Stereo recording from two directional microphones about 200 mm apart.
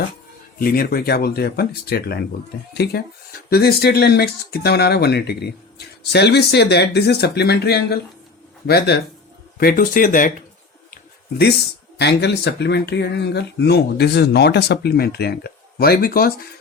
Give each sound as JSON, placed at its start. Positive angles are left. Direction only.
{"t": 0.6, "sound": "speech", "side_deg": 50}
{"t": 10.9, "sound": "a sound", "side_deg": 55}
{"t": 11.9, "sound": "speech", "side_deg": 55}